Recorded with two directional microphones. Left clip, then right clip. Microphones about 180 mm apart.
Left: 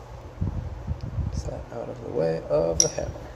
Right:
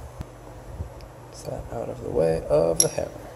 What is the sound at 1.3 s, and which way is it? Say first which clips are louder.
Speech: right 3 dB; 20° right (ahead or behind).